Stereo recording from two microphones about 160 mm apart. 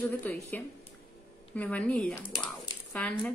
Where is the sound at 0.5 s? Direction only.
10° left (ahead or behind).